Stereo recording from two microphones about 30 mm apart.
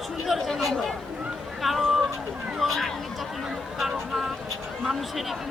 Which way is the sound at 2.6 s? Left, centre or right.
Centre.